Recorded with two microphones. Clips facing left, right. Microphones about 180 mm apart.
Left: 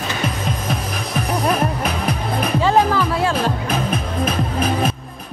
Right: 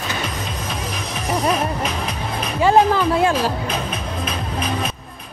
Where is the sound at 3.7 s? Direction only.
55° left (ahead or behind).